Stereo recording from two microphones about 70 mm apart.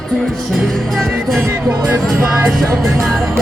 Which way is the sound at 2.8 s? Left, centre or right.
Centre.